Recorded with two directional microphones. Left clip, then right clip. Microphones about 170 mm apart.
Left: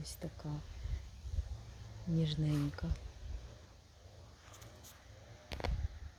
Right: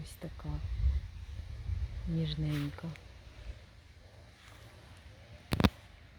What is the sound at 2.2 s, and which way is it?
Speech, 5° left (ahead or behind).